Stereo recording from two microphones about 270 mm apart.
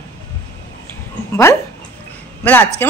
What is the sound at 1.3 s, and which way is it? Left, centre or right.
Speech, centre.